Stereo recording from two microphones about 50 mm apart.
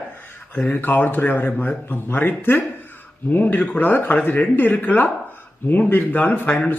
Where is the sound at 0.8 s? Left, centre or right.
Left.